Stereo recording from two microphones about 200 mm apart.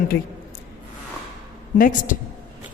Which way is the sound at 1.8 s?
40° left (ahead or behind).